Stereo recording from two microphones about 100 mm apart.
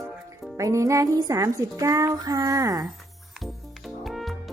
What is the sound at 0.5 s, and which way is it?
Speech, 30° right (ahead or behind).